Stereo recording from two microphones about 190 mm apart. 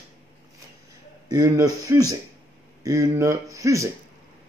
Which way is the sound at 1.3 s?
20° right (ahead or behind).